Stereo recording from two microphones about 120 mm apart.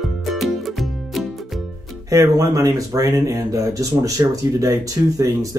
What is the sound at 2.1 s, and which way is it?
Speech, 30° right (ahead or behind).